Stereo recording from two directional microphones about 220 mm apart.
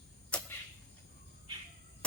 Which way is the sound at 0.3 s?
5° left (ahead or behind).